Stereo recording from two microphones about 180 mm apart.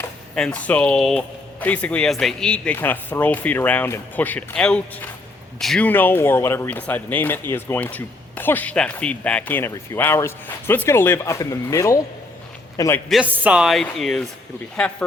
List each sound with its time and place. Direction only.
0.3 s a man's voice: 5° left (ahead or behind)
13.1 s speech: 5° right (ahead or behind)